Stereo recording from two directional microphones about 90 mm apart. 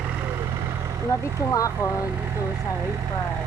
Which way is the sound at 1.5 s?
40° left (ahead or behind).